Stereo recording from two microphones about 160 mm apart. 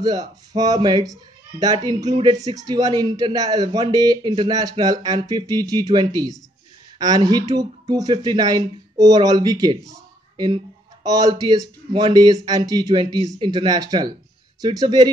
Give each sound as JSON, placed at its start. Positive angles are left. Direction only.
{"t": 0.0, "sound": "speech", "side_deg": -25}